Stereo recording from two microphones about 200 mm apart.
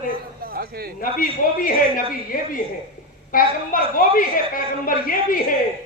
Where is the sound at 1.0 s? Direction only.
45° left (ahead or behind).